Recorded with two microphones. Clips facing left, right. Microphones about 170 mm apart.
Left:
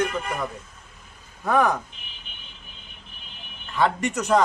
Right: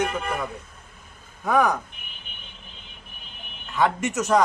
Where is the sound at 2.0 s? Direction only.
60° right (ahead or behind).